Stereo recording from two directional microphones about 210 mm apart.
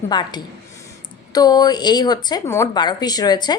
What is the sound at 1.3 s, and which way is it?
Speech, 20° left (ahead or behind).